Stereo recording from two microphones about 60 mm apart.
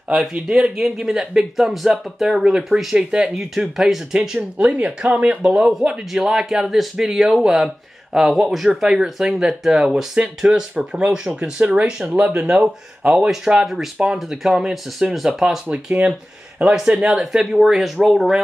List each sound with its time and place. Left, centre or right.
0.1 s speech: centre
4.6 s speech: centre
14.1 s speech: centre